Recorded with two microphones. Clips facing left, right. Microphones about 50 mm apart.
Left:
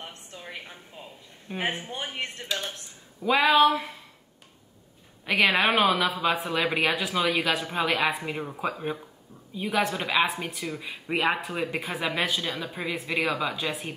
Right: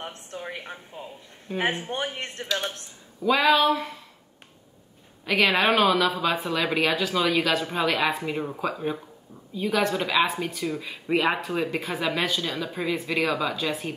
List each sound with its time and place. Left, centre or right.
0.0 s a sound: right
1.5 s speech: centre
1.9 s a man's voice: right
3.3 s speech: centre
5.2 s speech: centre